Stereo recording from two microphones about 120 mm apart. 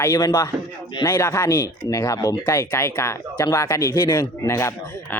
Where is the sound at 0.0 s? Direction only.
30° left (ahead or behind).